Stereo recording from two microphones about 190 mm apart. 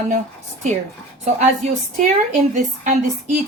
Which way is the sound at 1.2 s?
40° right (ahead or behind).